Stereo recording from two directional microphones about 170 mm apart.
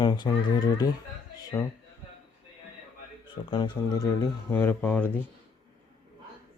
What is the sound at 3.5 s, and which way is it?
Speech, 25° left (ahead or behind).